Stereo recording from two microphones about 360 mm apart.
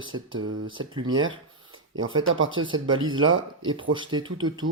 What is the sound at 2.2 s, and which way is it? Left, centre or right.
Speech, right.